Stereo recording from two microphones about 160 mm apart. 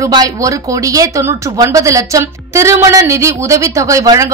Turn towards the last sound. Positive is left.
turn(degrees=-20)  # may be behind; listen again after turning